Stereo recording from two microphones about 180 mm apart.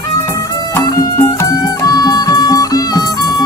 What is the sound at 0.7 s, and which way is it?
Music, 20° left (ahead or behind).